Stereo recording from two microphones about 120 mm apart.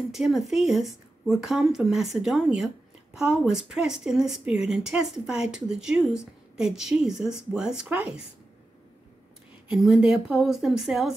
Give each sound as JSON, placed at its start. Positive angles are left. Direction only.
{"t": 0.1, "sound": "a woman's voice", "side_deg": 0}
{"t": 9.7, "sound": "a woman's voice", "side_deg": -5}